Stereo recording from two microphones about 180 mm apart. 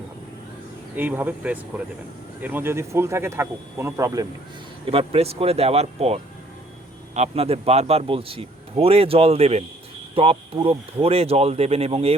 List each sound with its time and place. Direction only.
0.9 s speech: 10° right (ahead or behind)
4.9 s a man's voice: 30° right (ahead or behind)